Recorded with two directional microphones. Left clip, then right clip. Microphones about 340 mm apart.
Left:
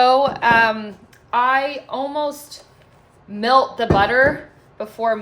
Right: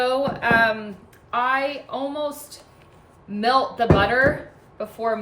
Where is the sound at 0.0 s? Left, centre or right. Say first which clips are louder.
Left 7 dB; centre.